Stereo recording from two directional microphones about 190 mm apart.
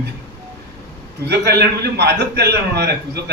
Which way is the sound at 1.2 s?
60° right (ahead or behind).